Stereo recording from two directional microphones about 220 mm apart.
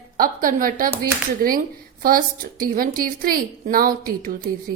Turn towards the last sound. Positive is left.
turn(degrees=-40)  # may be behind; listen again after turning